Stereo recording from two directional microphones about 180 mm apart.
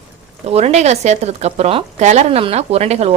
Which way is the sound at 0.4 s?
35° right (ahead or behind).